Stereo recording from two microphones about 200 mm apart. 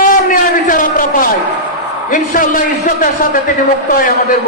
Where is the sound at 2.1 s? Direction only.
40° left (ahead or behind).